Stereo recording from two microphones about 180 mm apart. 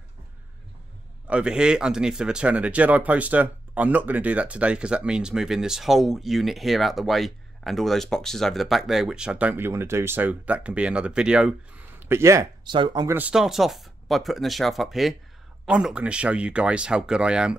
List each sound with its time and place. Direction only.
1.2 s speech: 5° right (ahead or behind)
12.1 s speech: 15° right (ahead or behind)
13.1 s speech: 5° right (ahead or behind)